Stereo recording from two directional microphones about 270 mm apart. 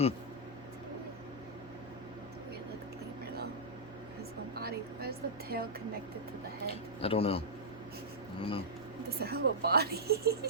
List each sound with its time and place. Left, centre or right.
4.5 s a sound: right
7.0 s a man's voice: left
9.0 s speech: right